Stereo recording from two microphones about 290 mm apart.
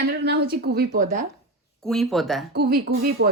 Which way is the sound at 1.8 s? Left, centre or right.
Centre.